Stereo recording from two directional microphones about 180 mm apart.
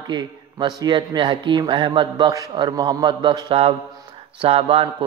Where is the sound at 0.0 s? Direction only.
25° right (ahead or behind).